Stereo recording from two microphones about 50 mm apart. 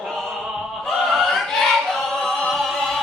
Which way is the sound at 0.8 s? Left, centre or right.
Centre.